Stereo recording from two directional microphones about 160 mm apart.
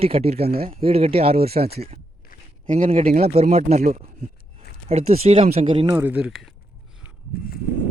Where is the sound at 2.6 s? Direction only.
55° right (ahead or behind); by 5.9 s 35° right (ahead or behind).